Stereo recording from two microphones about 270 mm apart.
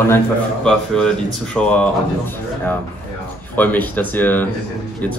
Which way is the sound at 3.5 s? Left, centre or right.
Centre.